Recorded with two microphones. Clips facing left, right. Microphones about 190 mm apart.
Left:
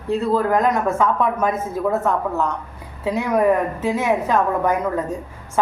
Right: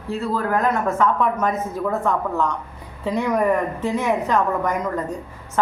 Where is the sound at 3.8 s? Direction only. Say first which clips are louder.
Left 2 dB; 10° left (ahead or behind).